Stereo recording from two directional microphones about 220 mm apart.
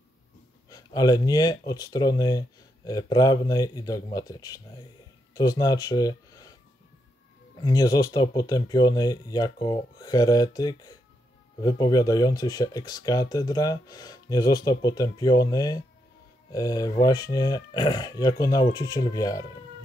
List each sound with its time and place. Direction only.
0.7 s speech: 15° left (ahead or behind)
7.6 s speech: 20° left (ahead or behind)